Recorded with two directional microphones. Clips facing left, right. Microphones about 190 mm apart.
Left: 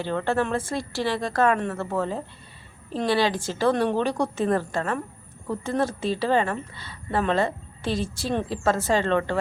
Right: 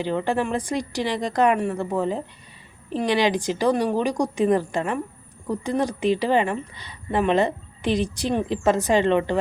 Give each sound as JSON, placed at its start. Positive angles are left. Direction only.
{"t": 0.0, "sound": "a woman's voice", "side_deg": -15}